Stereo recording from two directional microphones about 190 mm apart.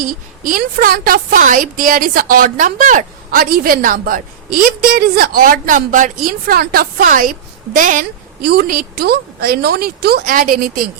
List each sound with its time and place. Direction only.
0.0 s a woman's voice: 50° right (ahead or behind)